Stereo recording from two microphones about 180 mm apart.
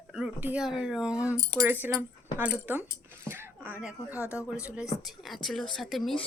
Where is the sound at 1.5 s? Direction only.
10° right (ahead or behind).